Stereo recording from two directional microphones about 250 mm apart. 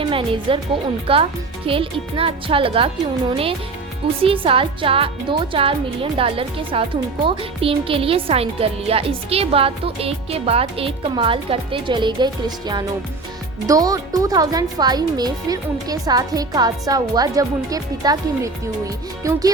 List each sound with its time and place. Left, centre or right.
0.0 s speech: right
4.2 s speech: right